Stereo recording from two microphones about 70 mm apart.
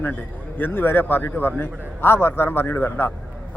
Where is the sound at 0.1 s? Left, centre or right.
Left.